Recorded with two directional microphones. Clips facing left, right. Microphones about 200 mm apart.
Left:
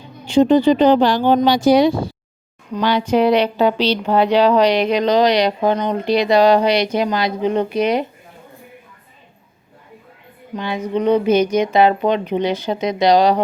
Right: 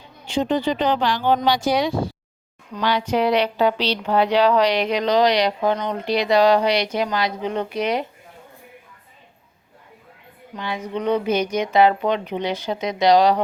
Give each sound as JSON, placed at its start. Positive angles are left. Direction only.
{"t": 0.3, "sound": "speech", "side_deg": 35}
{"t": 10.6, "sound": "speech", "side_deg": 20}